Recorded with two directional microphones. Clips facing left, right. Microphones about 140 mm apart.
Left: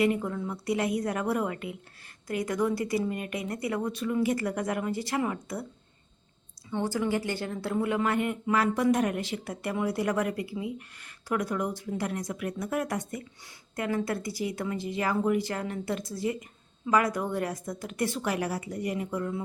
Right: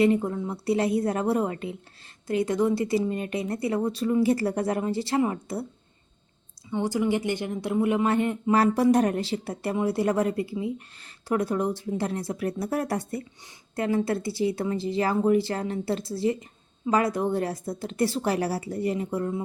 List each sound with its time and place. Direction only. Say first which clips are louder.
0.0 s speech: right 4 dB; 30° right (ahead or behind)
6.7 s a woman's voice: right 3 dB; 15° right (ahead or behind)